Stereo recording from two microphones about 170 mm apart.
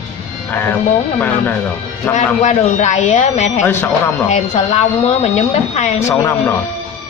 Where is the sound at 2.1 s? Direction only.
45° left (ahead or behind).